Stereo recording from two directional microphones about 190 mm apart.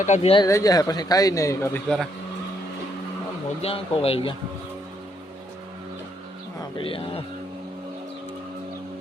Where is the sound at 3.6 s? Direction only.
30° left (ahead or behind).